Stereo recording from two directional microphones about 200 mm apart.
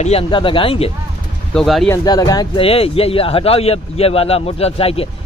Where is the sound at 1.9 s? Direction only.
20° left (ahead or behind).